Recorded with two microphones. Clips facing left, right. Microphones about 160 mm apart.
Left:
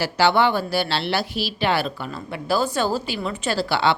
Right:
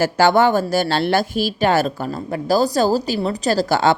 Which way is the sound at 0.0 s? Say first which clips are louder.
Right 4 dB; 45° right (ahead or behind).